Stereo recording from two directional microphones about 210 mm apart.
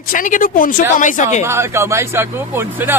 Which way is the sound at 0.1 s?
40° left (ahead or behind).